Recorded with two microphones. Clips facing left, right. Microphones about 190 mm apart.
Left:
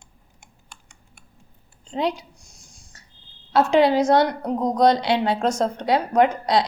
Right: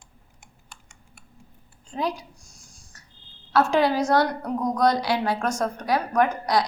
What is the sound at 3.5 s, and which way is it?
A woman's voice, 20° left (ahead or behind).